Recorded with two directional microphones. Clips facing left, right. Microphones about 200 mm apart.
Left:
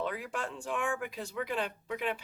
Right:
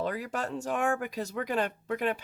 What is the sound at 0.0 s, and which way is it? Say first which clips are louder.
Speech: right 3 dB; 40° right (ahead or behind).